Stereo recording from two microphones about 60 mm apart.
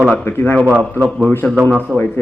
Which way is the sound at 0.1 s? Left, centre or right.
Left.